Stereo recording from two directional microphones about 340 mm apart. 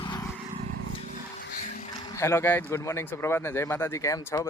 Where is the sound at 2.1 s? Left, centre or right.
Centre.